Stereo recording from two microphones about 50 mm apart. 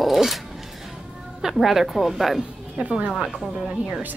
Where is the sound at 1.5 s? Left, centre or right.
Centre.